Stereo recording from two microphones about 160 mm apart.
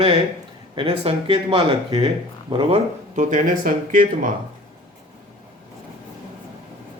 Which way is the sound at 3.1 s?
50° right (ahead or behind).